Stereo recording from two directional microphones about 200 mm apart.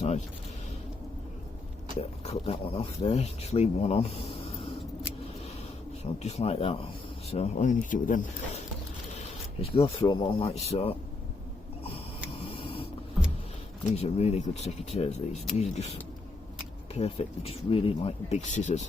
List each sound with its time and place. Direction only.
2.0 s speech: 30° left (ahead or behind)
6.0 s speech: 30° left (ahead or behind)
9.6 s speech: 25° left (ahead or behind)
12.5 s a sound: 25° left (ahead or behind)
13.9 s speech: 30° left (ahead or behind)
16.9 s speech: 30° left (ahead or behind)